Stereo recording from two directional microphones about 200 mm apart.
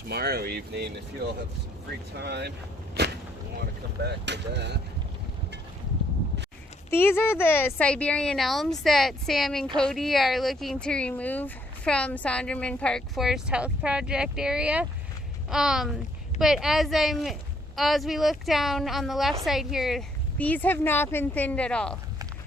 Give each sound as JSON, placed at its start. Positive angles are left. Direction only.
{"t": 0.1, "sound": "speech", "side_deg": -50}
{"t": 2.1, "sound": "speech", "side_deg": -55}
{"t": 4.0, "sound": "speech", "side_deg": -60}
{"t": 6.9, "sound": "speech", "side_deg": 10}